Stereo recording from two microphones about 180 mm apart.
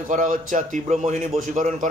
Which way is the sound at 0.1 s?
45° right (ahead or behind).